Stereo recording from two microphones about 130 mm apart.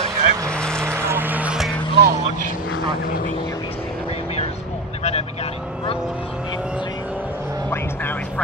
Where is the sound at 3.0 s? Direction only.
90° left.